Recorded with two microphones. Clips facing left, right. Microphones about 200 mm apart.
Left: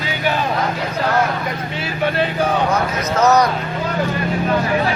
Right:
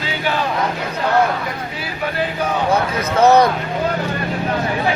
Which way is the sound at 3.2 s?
30° right (ahead or behind).